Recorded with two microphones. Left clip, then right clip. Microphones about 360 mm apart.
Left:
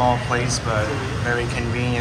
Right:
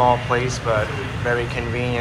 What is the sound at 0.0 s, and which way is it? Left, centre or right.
Speech, centre.